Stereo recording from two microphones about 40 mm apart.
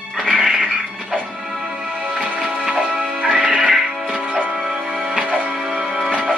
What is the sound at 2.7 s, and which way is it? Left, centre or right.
Music, centre.